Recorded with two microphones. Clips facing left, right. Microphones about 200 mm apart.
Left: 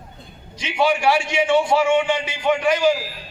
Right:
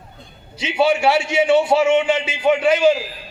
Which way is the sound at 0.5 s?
25° right (ahead or behind).